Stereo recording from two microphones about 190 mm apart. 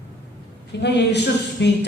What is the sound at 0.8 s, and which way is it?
Speech, 60° left (ahead or behind).